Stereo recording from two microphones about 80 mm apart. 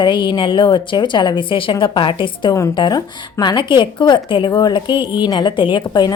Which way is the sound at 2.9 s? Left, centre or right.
Left.